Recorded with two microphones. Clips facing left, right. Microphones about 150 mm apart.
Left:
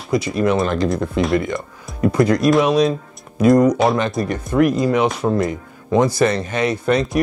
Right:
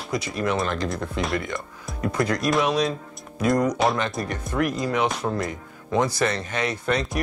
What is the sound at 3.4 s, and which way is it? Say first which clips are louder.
Speech: left 9 dB; 25° left (ahead or behind).